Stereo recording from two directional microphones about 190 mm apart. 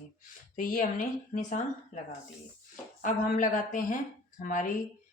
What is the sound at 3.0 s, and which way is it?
Speech, 45° left (ahead or behind).